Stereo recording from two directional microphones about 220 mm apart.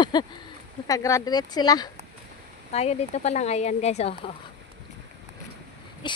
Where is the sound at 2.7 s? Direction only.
30° left (ahead or behind).